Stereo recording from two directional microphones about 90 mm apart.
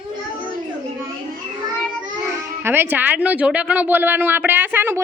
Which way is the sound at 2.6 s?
25° right (ahead or behind).